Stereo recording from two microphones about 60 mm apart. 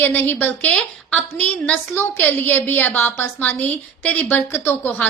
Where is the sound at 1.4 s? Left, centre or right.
Centre.